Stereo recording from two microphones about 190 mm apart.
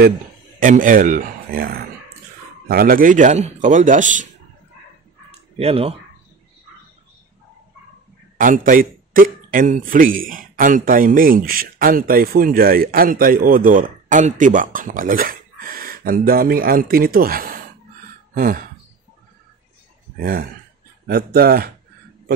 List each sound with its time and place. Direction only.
0.6 s speech: 45° right (ahead or behind)
2.7 s a man's voice: 50° right (ahead or behind)
5.6 s a man's voice: 30° right (ahead or behind)
8.4 s a man's voice: 45° right (ahead or behind)
18.3 s throat clearing: 45° right (ahead or behind)
20.2 s a man's voice: 55° right (ahead or behind)